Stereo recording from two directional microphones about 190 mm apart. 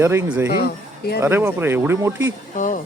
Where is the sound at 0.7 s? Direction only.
55° left (ahead or behind).